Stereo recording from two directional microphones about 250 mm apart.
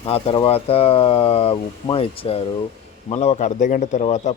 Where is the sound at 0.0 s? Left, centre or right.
Left.